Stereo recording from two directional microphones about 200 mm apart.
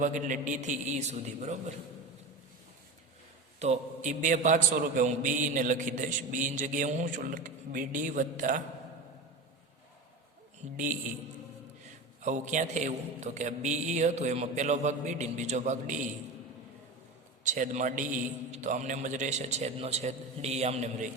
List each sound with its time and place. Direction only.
0.0 s a man's voice: 40° right (ahead or behind)
3.6 s a man's voice: 35° right (ahead or behind)
12.2 s a man's voice: 40° right (ahead or behind)
17.4 s a man's voice: 40° right (ahead or behind)